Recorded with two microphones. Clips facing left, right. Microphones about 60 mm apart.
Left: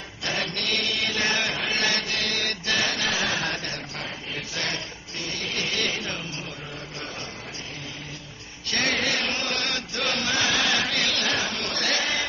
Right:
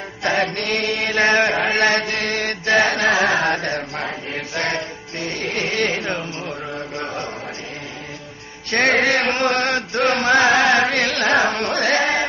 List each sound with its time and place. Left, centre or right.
0.2 s chant: right
8.6 s chant: right